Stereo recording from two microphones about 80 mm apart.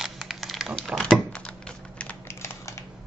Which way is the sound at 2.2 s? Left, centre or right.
Left.